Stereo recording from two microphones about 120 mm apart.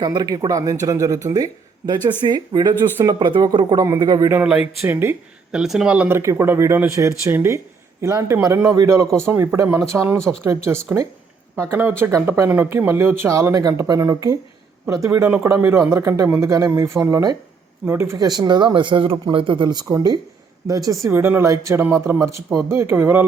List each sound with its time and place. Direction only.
0.0 s speech: 35° right (ahead or behind)
2.2 s speech: 40° right (ahead or behind)
4.4 s speech: 5° right (ahead or behind)
4.8 s speech: 20° right (ahead or behind)
5.5 s speech: 5° right (ahead or behind); by 18.3 s 20° right (ahead or behind)
18.3 s speech: 35° right (ahead or behind)
21.1 s speech: 20° right (ahead or behind)